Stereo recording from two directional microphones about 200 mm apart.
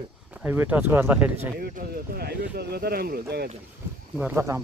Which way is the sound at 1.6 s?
50° right (ahead or behind).